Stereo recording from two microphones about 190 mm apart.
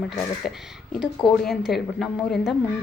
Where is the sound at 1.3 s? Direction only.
Centre (ahead or behind).